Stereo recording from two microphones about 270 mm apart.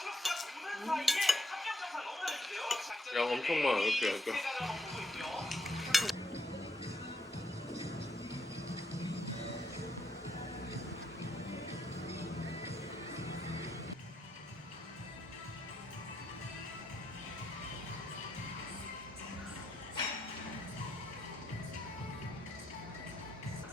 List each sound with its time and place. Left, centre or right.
0.0 s dishes: centre